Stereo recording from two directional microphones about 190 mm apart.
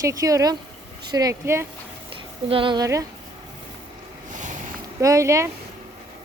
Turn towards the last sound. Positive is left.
turn(degrees=-15)  # may be behind; listen again after turning